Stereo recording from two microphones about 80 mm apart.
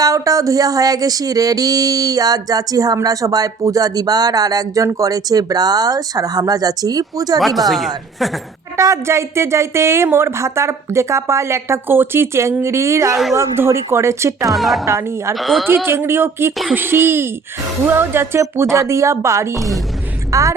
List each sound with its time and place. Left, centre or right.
0.0 s music: right
7.3 s speech: centre
8.7 s a woman's voice: right
14.5 s speech: centre
14.8 s a woman's voice: right
15.4 s speech: centre
15.6 s a woman's voice: right
19.5 s speech: centre
20.3 s a woman's voice: right